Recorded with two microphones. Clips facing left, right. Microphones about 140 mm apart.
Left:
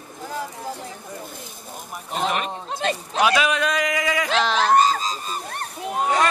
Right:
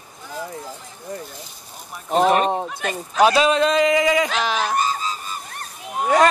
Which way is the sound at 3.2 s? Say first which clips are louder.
Right 5 dB; 30° right (ahead or behind).